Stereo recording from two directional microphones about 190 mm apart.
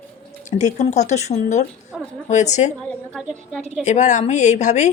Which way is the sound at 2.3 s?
40° left (ahead or behind).